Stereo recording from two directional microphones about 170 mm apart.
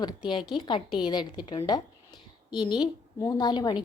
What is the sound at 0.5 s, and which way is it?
A woman's voice, 25° left (ahead or behind).